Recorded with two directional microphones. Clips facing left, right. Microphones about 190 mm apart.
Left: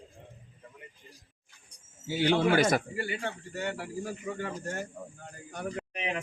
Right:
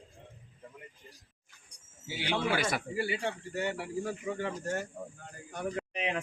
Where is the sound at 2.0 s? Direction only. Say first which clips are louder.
Left 7 dB; 45° left (ahead or behind).